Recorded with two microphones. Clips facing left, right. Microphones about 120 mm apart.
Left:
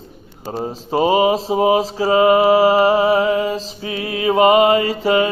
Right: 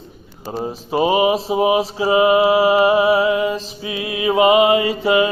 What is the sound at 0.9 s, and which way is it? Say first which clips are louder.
Mantra: left 1 dB; 30° left (ahead or behind).